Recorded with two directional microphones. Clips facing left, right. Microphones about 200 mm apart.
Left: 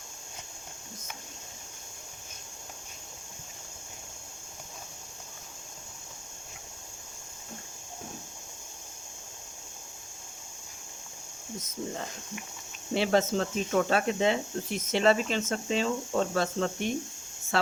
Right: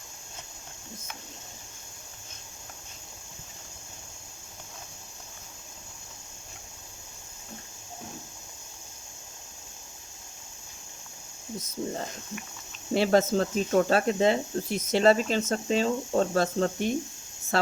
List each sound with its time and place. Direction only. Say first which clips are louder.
12.9 s speech: right 3 dB; 40° right (ahead or behind)